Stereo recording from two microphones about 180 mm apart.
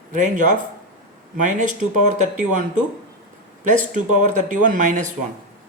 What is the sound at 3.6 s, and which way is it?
Speech, 45° right (ahead or behind).